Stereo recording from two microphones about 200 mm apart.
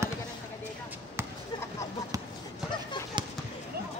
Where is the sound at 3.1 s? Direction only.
20° right (ahead or behind).